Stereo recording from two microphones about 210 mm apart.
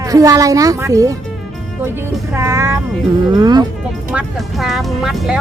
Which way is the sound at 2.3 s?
15° right (ahead or behind).